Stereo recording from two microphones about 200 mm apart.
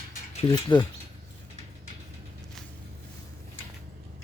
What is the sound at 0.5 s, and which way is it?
Speech, 20° left (ahead or behind).